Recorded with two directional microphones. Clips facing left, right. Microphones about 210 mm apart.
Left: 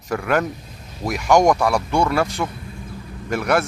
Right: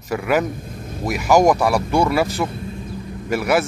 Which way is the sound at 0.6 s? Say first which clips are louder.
Right 9 dB; 50° right (ahead or behind).